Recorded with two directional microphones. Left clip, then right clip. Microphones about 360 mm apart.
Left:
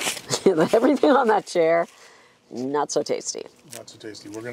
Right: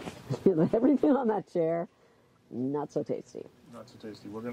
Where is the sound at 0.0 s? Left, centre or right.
Centre.